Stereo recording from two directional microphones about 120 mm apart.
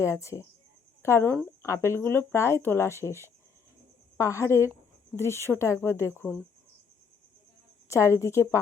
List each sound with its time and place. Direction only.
0.0 s speech: 25° left (ahead or behind)
7.9 s speech: 25° left (ahead or behind)